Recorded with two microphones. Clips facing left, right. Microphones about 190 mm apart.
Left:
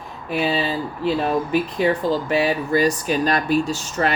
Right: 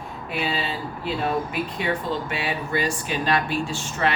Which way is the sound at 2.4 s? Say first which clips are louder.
Left 5 dB; 40° left (ahead or behind).